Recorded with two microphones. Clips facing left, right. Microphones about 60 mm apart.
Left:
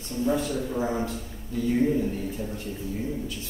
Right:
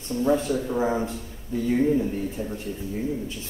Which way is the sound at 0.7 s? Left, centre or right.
Right.